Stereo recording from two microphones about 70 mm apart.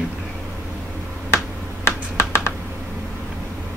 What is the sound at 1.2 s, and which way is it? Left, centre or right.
Finger snapping, left.